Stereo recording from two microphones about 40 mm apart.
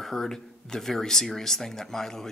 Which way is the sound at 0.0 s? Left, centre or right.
Centre.